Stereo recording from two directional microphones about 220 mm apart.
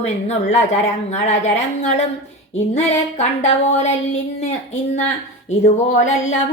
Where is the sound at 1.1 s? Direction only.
30° left (ahead or behind).